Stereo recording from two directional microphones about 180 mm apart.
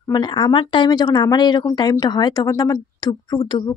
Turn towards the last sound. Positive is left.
turn(degrees=25)  # may be behind; listen again after turning